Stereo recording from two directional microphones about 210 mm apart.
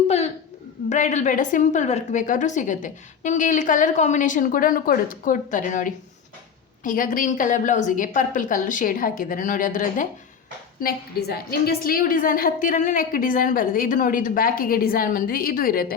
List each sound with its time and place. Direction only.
0.9 s a woman's voice: 35° left (ahead or behind)